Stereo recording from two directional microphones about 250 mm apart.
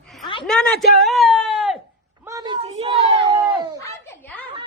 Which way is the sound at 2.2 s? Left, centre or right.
Centre.